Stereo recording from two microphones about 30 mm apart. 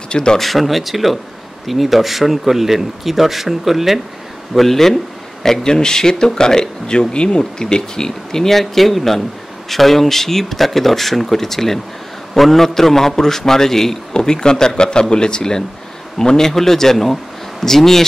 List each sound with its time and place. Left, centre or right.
0.1 s speech: left
0.4 s speech: centre
4.6 s speech: centre
8.5 s speech: centre